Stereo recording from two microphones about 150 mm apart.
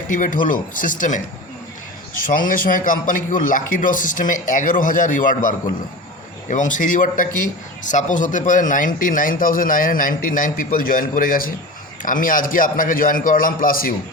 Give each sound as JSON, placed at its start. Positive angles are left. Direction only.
{"t": 0.1, "sound": "a man's voice", "side_deg": 60}